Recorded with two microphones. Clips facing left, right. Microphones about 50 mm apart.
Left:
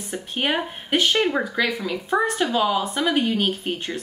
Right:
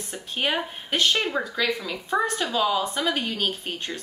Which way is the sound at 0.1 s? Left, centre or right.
Centre.